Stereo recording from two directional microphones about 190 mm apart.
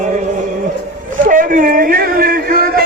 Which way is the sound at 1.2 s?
45° right (ahead or behind).